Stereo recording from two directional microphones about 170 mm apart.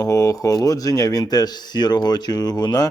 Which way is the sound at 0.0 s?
20° left (ahead or behind).